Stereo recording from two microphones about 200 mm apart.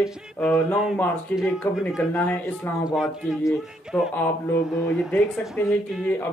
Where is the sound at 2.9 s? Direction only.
Centre (ahead or behind).